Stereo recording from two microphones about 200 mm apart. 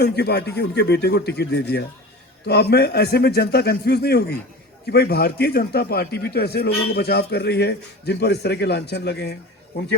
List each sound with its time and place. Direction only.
0.0 s a man's voice: 55° left (ahead or behind)